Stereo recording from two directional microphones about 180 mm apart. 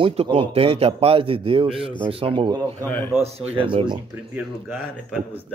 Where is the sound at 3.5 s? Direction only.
30° right (ahead or behind).